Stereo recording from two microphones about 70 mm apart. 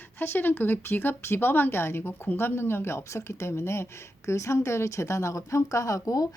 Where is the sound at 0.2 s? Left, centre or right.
Left.